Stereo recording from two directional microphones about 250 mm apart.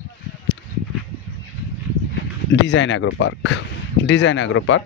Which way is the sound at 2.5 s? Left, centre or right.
Left.